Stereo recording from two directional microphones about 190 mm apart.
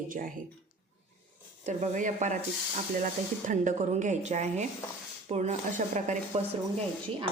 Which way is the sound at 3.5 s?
40° right (ahead or behind).